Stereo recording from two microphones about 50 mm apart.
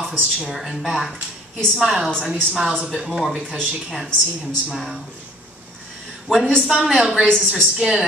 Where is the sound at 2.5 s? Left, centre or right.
Centre.